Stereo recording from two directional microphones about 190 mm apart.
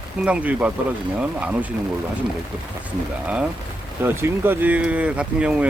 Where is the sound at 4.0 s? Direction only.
10° right (ahead or behind).